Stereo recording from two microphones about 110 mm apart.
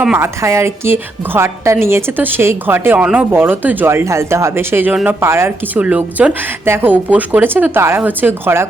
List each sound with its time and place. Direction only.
0.2 s a woman's voice: 25° right (ahead or behind)